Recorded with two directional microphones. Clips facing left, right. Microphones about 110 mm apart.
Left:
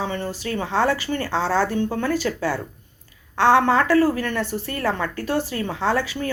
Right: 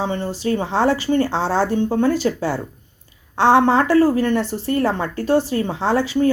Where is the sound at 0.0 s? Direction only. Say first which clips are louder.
Right 4 dB; 25° right (ahead or behind).